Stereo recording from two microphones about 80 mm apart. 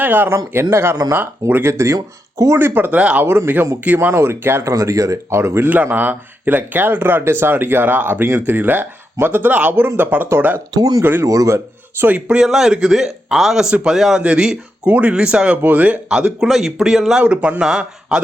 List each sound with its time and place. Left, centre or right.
0.0 s speech: right
0.3 s speech: right
1.7 s speech: right
2.6 s speech: right
3.0 s speech: centre
3.2 s speech: right
4.7 s speech: right
5.6 s speech: right
10.8 s speech: right
11.0 s speech: right
11.3 s speech: right
12.0 s speech: centre
12.4 s a man's voice: centre